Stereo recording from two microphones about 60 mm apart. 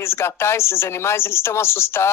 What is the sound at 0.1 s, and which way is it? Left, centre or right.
Speech, left.